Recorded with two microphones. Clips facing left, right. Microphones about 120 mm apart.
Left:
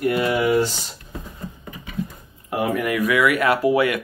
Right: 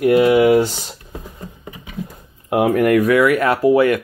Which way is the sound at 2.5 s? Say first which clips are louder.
Right 8 dB; 75° right (ahead or behind).